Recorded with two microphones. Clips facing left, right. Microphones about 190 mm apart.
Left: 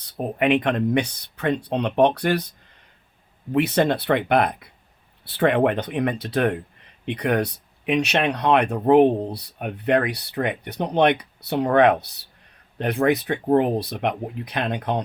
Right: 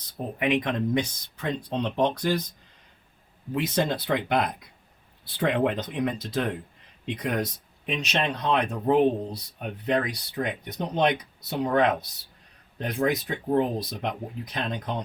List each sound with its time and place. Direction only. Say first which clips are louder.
0.0 s speech: left 6 dB; 65° left (ahead or behind)
3.5 s speech: left 6 dB; 65° left (ahead or behind)